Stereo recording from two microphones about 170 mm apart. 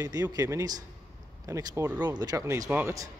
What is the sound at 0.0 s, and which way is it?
A man's voice, 20° right (ahead or behind).